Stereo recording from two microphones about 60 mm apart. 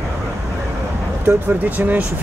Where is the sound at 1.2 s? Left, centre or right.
Right.